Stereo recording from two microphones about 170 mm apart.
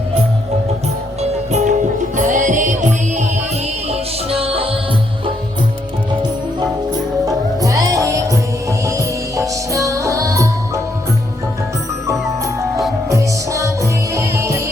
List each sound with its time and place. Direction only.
1.2 s music: 45° right (ahead or behind)
4.3 s music: 35° right (ahead or behind)
7.3 s music: 20° right (ahead or behind)
13.1 s music: 20° right (ahead or behind)